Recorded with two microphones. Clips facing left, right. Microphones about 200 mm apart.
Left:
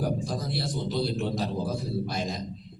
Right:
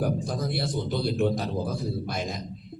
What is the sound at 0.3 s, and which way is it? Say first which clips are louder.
A man's voice: right 2 dB; 55° right (ahead or behind).